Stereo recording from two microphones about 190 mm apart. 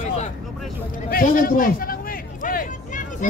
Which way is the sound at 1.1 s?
45° left (ahead or behind).